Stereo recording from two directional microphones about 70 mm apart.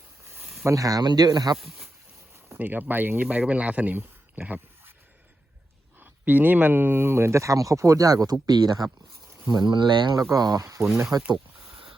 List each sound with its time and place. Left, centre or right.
0.3 s a sound: centre
0.6 s speech: right
1.5 s speech: centre
2.6 s speech: right
6.0 s speech: right
9.5 s speech: right
10.2 s speech: right
11.1 s speech: centre